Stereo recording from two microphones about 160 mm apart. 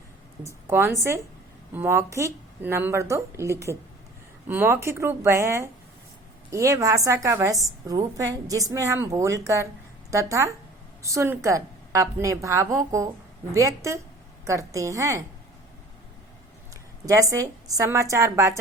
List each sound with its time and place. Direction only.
0.4 s a woman's voice: 15° right (ahead or behind)
17.1 s a woman's voice: 20° right (ahead or behind)